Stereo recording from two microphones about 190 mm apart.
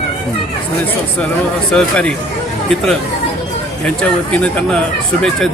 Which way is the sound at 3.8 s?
5° left (ahead or behind).